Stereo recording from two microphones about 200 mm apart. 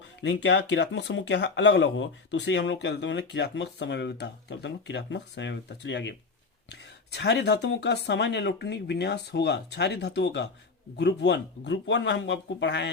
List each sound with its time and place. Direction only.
0.2 s speech: 60° left (ahead or behind)